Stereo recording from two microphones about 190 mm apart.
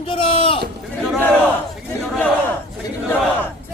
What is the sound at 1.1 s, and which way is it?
A man's voice, 5° left (ahead or behind).